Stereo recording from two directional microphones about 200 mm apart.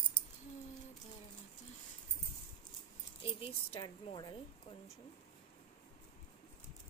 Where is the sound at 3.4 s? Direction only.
30° left (ahead or behind).